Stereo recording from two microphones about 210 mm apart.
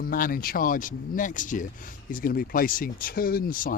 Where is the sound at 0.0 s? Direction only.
45° left (ahead or behind).